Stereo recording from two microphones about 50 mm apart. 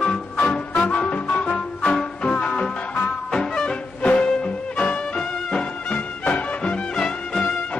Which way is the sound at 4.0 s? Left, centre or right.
Left.